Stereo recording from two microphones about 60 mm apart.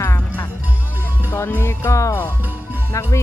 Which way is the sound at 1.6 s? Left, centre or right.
Left.